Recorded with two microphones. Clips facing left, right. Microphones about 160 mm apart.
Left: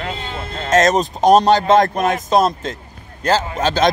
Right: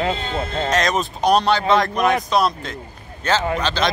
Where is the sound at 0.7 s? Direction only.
45° left (ahead or behind).